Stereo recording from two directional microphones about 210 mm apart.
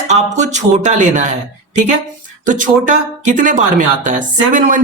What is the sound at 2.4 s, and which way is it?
Speech, 40° right (ahead or behind).